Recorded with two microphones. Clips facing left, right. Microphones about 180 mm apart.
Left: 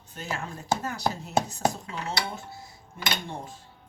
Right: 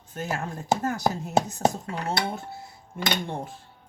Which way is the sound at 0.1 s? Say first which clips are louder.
Right 4 dB; 50° right (ahead or behind).